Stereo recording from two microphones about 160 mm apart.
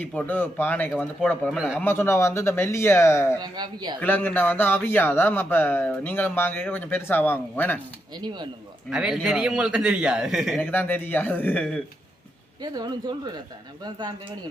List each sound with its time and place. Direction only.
0.0 s speech: 10° left (ahead or behind)
1.5 s a man's voice: 5° right (ahead or behind)
1.8 s speech: 15° left (ahead or behind)
3.4 s speech: 25° right (ahead or behind)
4.0 s speech: 10° left (ahead or behind)
8.2 s speech: 30° right (ahead or behind)
8.9 s a man's voice: 5° right (ahead or behind)
10.6 s speech: 10° left (ahead or behind)
12.6 s speech: 25° right (ahead or behind)